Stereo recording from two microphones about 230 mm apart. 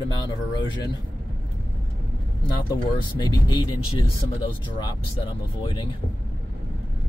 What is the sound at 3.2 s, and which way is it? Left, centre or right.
Speech, centre.